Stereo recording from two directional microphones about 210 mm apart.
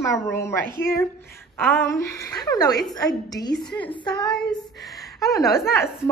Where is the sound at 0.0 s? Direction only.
15° left (ahead or behind).